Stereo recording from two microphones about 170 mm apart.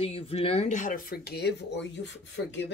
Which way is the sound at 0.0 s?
35° left (ahead or behind).